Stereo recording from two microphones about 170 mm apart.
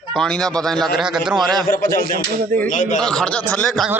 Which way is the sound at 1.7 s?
60° left (ahead or behind).